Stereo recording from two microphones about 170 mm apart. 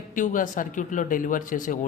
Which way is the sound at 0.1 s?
50° left (ahead or behind).